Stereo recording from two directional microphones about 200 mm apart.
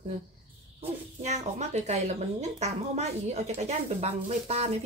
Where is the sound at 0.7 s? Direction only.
35° right (ahead or behind).